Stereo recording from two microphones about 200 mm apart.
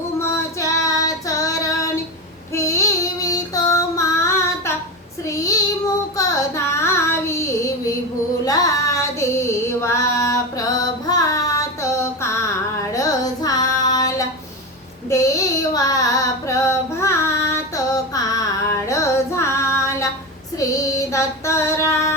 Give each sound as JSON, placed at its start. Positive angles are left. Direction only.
{"t": 0.2, "sound": "female singing", "side_deg": 15}
{"t": 2.6, "sound": "child singing", "side_deg": 15}
{"t": 8.4, "sound": "female singing", "side_deg": 15}
{"t": 10.8, "sound": "music", "side_deg": 20}
{"t": 12.9, "sound": "child singing", "side_deg": 15}
{"t": 15.1, "sound": "a sound", "side_deg": 15}
{"t": 15.7, "sound": "female singing", "side_deg": 15}